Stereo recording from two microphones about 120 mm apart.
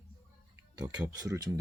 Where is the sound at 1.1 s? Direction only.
25° right (ahead or behind).